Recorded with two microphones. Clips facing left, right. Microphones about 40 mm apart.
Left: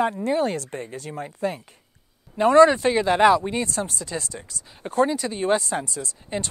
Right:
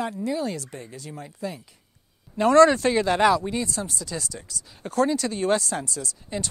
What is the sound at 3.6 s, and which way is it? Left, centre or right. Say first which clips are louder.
Speech: left 3 dB; left.